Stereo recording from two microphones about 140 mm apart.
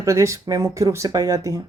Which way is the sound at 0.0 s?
20° right (ahead or behind).